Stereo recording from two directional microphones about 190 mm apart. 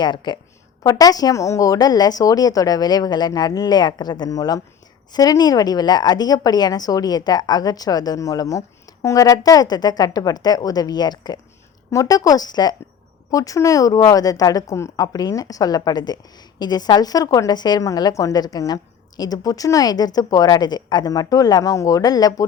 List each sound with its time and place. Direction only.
0.0 s speech: 25° left (ahead or behind)